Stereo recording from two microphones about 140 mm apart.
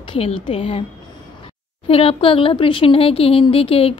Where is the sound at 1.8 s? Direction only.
40° left (ahead or behind).